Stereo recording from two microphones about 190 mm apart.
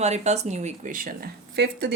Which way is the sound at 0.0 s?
35° right (ahead or behind).